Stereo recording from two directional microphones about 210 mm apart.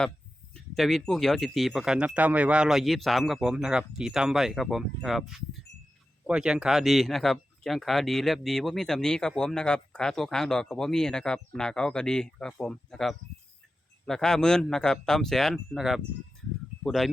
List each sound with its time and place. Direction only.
0.5 s speech: centre (ahead or behind)